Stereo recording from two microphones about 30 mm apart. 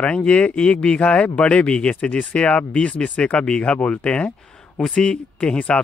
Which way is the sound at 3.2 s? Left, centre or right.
Left.